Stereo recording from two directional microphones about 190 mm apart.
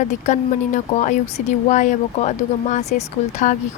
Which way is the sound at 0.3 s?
40° left (ahead or behind).